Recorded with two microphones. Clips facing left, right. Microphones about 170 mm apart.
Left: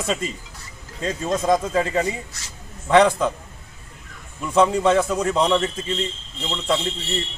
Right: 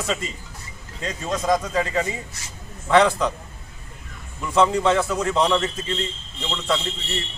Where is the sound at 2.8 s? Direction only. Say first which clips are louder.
Left 2 dB; 20° left (ahead or behind).